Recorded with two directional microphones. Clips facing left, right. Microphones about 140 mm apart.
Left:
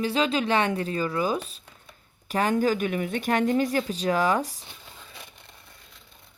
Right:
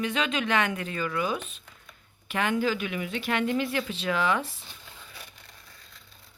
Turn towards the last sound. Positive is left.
turn(degrees=40)  # may be behind; listen again after turning